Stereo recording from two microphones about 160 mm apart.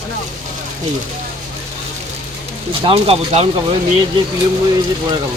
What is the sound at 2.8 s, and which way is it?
Speech, 35° right (ahead or behind).